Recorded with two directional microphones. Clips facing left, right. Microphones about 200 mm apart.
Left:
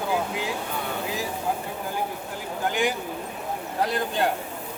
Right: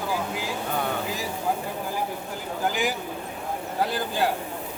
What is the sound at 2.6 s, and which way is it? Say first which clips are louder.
Speech: left 1 dB; centre (ahead or behind).